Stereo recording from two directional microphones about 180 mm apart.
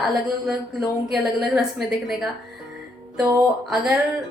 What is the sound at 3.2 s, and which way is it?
Music, 15° right (ahead or behind).